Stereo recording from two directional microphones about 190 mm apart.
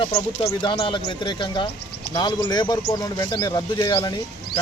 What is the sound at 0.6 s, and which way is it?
Speech, 25° left (ahead or behind).